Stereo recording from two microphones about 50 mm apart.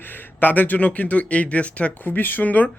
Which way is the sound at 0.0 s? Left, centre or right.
Left.